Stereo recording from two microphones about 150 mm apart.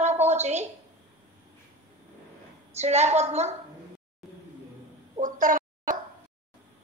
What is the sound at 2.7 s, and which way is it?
Speech, 50° right (ahead or behind).